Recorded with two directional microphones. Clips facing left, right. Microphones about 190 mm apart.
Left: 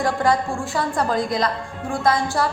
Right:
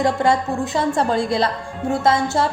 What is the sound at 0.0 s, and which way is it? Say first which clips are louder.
A woman's voice: right 2 dB; 25° right (ahead or behind).